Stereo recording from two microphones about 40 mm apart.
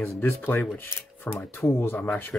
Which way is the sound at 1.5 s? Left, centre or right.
Left.